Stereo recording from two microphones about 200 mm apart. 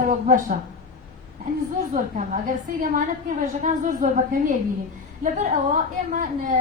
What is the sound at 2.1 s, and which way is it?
A woman's voice, 40° right (ahead or behind).